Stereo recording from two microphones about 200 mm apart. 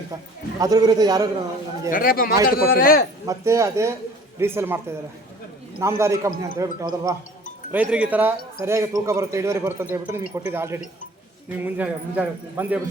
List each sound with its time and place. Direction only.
0.6 s a man's voice: 20° right (ahead or behind)
1.9 s speech: 45° left (ahead or behind)
3.2 s a man's voice: 15° right (ahead or behind)